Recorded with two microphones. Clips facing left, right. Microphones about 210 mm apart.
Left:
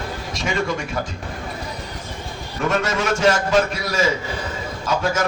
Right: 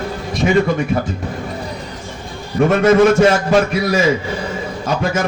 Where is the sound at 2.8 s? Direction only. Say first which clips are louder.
Right 12 dB; 55° right (ahead or behind).